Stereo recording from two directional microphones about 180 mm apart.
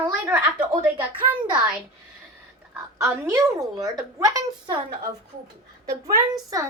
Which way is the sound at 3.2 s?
15° right (ahead or behind).